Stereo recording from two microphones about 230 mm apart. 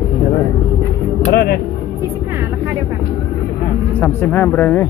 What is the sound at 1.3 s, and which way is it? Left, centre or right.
Speech, left.